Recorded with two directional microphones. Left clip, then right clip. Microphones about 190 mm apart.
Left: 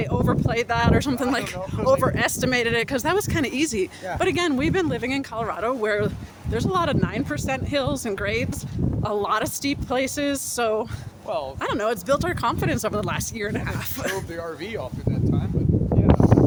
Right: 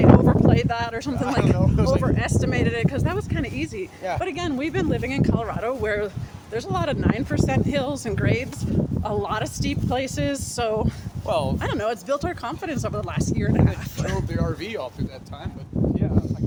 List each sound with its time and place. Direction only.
0.0 s a sound: 20° left (ahead or behind)
0.5 s speech: 35° left (ahead or behind); by 1.5 s 50° left (ahead or behind)
1.5 s speech: 25° right (ahead or behind)
2.0 s speech: 55° left (ahead or behind); by 3.8 s 75° left (ahead or behind)
4.2 s speech: 60° left (ahead or behind)
4.4 s speech: 35° left (ahead or behind)
10.6 s speech: 15° left (ahead or behind)
11.3 s speech: 45° right (ahead or behind)
11.6 s speech: 20° left (ahead or behind)
12.0 s speech: 40° left (ahead or behind)